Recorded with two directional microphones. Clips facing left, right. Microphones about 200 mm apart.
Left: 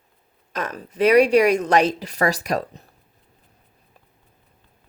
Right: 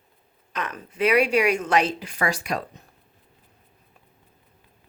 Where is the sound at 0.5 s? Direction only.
40° left (ahead or behind).